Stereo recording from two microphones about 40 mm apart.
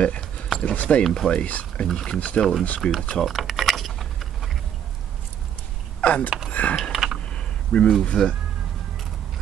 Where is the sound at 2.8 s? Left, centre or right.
Left.